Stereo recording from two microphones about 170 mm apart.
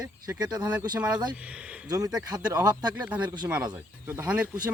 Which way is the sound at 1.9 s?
20° right (ahead or behind).